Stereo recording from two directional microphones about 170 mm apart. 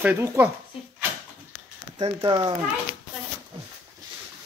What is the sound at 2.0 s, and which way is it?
Speech, 30° right (ahead or behind).